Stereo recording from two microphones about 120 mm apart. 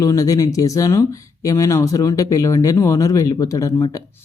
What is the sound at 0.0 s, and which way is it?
Speech, 30° left (ahead or behind).